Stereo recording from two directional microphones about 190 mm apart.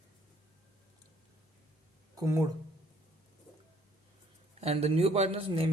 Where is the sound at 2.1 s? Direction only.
15° right (ahead or behind).